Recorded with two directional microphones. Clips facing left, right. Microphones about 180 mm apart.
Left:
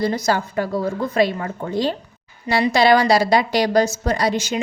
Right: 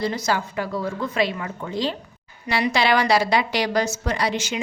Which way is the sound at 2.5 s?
35° left (ahead or behind).